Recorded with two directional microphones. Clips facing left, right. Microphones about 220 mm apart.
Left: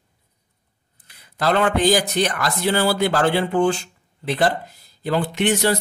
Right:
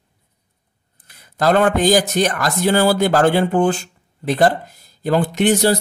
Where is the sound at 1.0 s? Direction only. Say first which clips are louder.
Right 4 dB; 45° right (ahead or behind).